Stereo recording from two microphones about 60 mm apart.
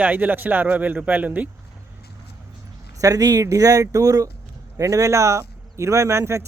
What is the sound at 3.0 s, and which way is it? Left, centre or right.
Speech, right.